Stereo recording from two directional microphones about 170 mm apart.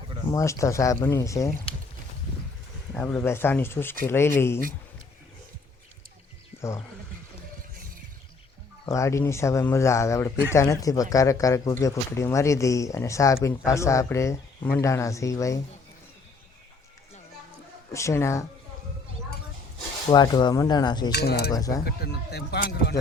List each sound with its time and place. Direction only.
0.3 s speech: 20° left (ahead or behind)
2.9 s speech: 5° left (ahead or behind)
6.5 s a sound: 15° left (ahead or behind)
8.9 s speech: 15° left (ahead or behind)
17.9 s speech: 15° left (ahead or behind)
20.1 s speech: 25° left (ahead or behind)
21.1 s speech: 75° left (ahead or behind)
21.5 s speech: 20° left (ahead or behind)
21.8 s speech: 70° left (ahead or behind)